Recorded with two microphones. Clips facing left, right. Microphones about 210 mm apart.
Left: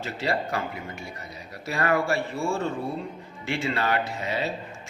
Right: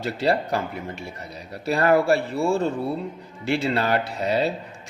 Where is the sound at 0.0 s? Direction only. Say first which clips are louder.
Right 5 dB; 35° right (ahead or behind).